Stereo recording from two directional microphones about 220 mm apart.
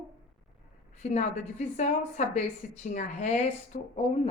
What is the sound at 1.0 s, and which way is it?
Speech, 30° left (ahead or behind).